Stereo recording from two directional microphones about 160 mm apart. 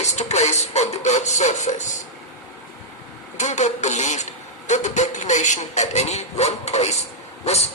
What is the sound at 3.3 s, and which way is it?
Speech, 45° left (ahead or behind).